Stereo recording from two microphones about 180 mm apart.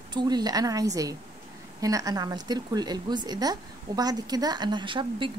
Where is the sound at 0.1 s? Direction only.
25° right (ahead or behind).